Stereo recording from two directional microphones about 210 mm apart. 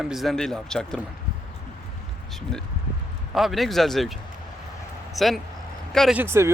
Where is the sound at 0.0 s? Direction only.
Centre (ahead or behind).